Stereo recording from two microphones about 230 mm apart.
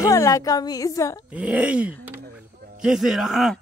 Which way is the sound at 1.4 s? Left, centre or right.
Centre.